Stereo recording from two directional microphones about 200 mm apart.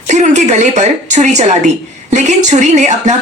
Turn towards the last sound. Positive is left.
turn(degrees=-35)  # may be behind; listen again after turning